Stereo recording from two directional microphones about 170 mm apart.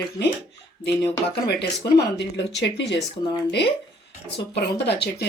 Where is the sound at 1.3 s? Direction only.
80° left.